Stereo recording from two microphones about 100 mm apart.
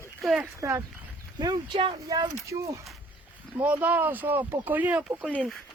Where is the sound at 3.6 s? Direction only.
15° right (ahead or behind).